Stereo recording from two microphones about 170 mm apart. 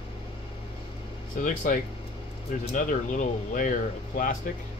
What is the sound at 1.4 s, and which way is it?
Speech, 50° left (ahead or behind).